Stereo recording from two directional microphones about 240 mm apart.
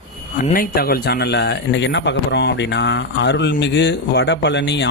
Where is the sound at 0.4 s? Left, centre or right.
Left.